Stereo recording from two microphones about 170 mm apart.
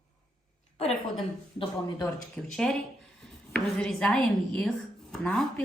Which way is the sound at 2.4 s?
5° left (ahead or behind).